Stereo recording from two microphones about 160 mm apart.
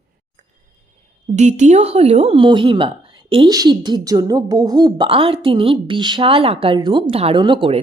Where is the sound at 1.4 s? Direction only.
50° right (ahead or behind).